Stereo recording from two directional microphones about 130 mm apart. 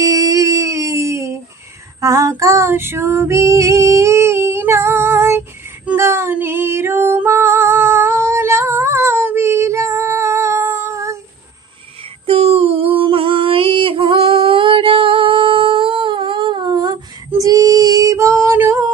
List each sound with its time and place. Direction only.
0.0 s music: 25° right (ahead or behind)
2.0 s female singing: 25° right (ahead or behind)
12.2 s female singing: 50° right (ahead or behind); by 18.9 s 15° right (ahead or behind)